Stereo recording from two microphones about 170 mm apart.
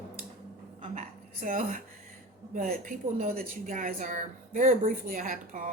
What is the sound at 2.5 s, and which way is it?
A woman's voice, 50° right (ahead or behind).